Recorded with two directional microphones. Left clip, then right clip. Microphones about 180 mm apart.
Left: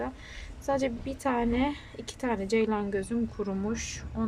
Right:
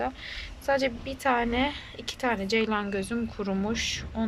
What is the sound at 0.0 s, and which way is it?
A woman's voice, 15° left (ahead or behind).